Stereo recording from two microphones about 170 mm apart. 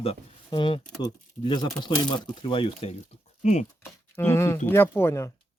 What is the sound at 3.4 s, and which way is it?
Speech, 40° left (ahead or behind).